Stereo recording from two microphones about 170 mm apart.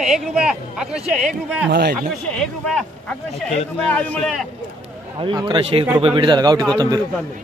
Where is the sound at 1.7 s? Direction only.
70° right (ahead or behind).